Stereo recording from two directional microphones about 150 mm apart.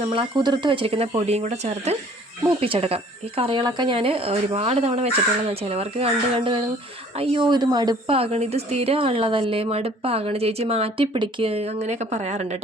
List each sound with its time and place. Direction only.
0.1 s speech: 30° right (ahead or behind); by 12.5 s 50° right (ahead or behind)